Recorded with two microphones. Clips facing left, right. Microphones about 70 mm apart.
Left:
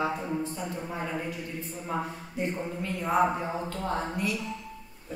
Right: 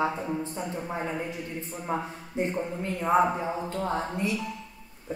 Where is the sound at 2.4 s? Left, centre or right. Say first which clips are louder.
Right 3 dB; right.